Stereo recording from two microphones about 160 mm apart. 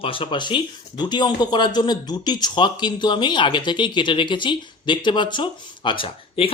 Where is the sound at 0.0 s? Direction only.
35° left (ahead or behind).